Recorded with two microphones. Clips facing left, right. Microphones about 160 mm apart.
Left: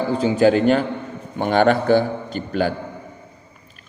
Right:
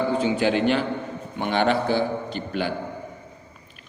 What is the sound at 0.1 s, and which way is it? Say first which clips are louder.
A man's voice: left 5 dB; 40° left (ahead or behind).